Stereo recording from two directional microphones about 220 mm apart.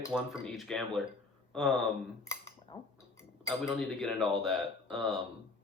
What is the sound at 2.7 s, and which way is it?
Speech, 15° left (ahead or behind).